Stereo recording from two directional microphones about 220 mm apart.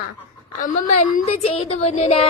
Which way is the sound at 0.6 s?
35° left (ahead or behind).